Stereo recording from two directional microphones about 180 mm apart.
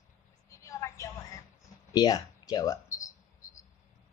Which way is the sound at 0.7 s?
20° left (ahead or behind).